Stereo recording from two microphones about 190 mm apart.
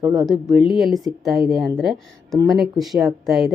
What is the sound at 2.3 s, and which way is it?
Speech, 20° right (ahead or behind).